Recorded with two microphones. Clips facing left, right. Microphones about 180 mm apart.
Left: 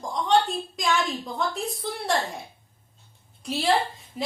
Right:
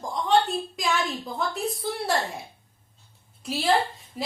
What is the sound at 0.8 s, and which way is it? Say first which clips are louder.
A woman's voice: left 4 dB; centre (ahead or behind).